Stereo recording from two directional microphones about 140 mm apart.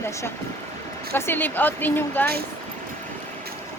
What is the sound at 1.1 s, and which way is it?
Speech, 15° left (ahead or behind).